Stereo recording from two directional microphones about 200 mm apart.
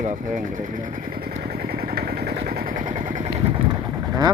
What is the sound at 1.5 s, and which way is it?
Vehicle, 50° right (ahead or behind).